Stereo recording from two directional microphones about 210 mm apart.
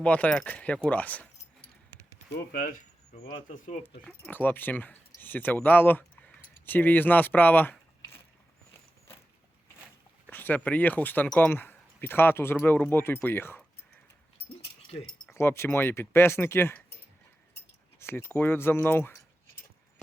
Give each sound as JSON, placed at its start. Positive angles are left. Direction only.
{"t": 0.0, "sound": "speech", "side_deg": 5}
{"t": 3.2, "sound": "speech", "side_deg": 40}
{"t": 4.0, "sound": "speech", "side_deg": 10}
{"t": 10.2, "sound": "speech", "side_deg": 10}
{"t": 15.3, "sound": "speech", "side_deg": 10}
{"t": 18.0, "sound": "speech", "side_deg": 10}